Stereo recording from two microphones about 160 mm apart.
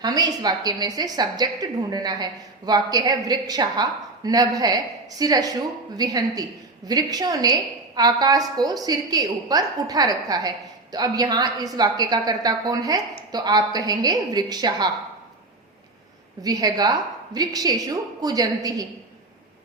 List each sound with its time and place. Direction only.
0.0 s a woman's voice: 25° right (ahead or behind)
16.4 s a woman's voice: 25° right (ahead or behind)